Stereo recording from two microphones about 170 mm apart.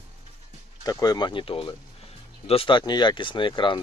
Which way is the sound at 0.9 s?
25° left (ahead or behind).